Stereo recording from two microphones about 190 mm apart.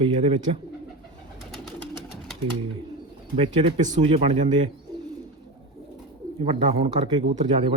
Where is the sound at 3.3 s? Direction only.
35° right (ahead or behind).